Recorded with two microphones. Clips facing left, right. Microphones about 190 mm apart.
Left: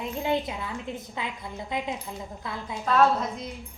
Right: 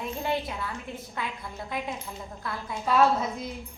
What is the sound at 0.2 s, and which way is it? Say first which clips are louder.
A woman's voice: left 4 dB; 15° left (ahead or behind).